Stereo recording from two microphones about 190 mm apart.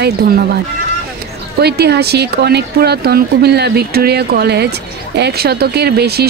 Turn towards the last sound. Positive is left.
turn(degrees=-60)  # may be behind; listen again after turning